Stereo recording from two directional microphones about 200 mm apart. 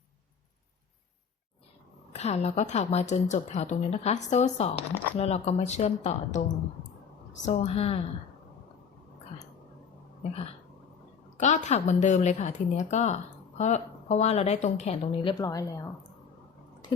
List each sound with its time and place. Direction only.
2.1 s a woman's voice: 30° left (ahead or behind)
7.4 s a woman's voice: 35° left (ahead or behind)
11.3 s a woman's voice: 35° left (ahead or behind); by 15.9 s 15° left (ahead or behind)